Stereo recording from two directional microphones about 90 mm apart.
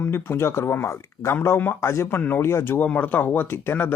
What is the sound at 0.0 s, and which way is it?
Speech, 25° left (ahead or behind).